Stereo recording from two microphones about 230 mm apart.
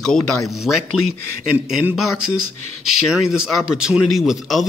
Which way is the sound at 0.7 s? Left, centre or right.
Left.